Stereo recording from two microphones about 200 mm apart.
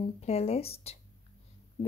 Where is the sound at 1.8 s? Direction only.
30° left (ahead or behind).